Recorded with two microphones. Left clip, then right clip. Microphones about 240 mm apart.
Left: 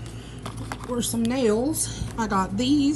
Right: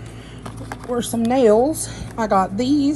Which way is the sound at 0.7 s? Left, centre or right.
Centre.